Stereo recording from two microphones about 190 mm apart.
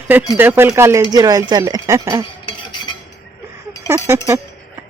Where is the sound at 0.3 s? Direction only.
10° right (ahead or behind).